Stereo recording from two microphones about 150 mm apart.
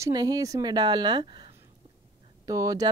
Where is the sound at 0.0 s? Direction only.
25° right (ahead or behind).